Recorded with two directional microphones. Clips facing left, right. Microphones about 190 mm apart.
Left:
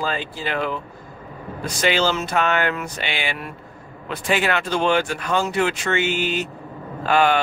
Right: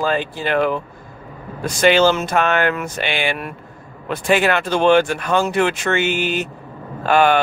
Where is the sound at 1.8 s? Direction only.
50° right (ahead or behind).